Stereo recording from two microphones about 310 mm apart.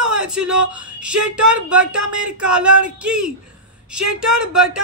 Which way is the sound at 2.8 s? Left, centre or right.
Centre.